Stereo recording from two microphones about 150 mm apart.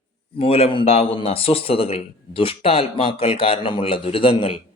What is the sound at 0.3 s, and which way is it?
A man's voice, 40° left (ahead or behind).